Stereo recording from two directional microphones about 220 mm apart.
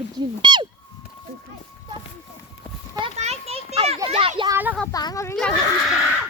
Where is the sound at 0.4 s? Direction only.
20° right (ahead or behind).